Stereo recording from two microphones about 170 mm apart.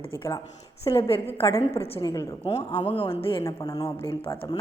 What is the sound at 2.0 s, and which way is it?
Speech, 20° left (ahead or behind).